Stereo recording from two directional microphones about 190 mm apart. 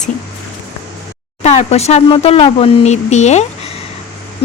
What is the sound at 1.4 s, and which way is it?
Speech, 35° left (ahead or behind).